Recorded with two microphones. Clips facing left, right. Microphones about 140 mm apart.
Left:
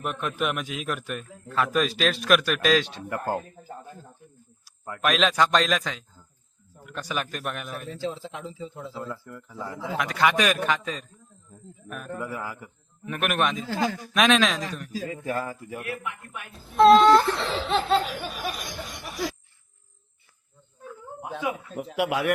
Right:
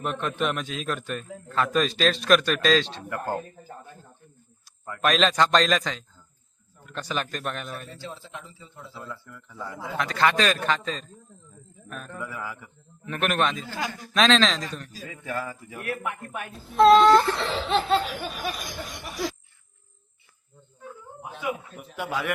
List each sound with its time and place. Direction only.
0.0 s a man's voice: 5° left (ahead or behind)
4.6 s a man's voice: 5° left (ahead or behind)
7.9 s a man's voice: 90° left
9.0 s speech: 40° left (ahead or behind)
9.5 s a man's voice: 10° left (ahead or behind)
12.1 s a man's voice: 40° left (ahead or behind)
12.5 s a man's voice: 5° left (ahead or behind)
15.1 s speech: 40° left (ahead or behind)
15.9 s a man's voice: 45° right (ahead or behind)
16.7 s a sound: centre (ahead or behind)
21.3 s a man's voice: 90° left; by 22.3 s 70° left (ahead or behind)